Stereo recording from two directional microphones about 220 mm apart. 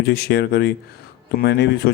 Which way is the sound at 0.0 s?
45° left (ahead or behind).